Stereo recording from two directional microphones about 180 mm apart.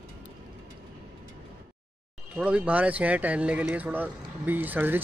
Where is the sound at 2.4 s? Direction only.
5° right (ahead or behind).